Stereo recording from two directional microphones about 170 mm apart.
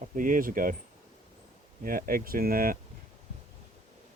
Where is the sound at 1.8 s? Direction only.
55° right (ahead or behind).